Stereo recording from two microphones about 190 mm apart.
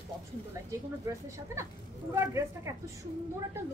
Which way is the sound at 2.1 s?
15° right (ahead or behind).